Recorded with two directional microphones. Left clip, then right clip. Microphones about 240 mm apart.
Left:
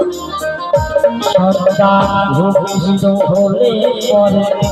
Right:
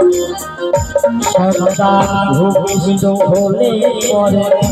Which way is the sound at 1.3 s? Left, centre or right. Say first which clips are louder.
Left 1 dB; right.